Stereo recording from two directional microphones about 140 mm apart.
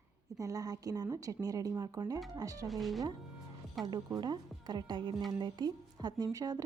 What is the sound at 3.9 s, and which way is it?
A woman's voice, 30° right (ahead or behind).